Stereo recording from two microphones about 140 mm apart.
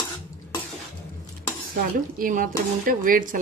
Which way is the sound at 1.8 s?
85° right.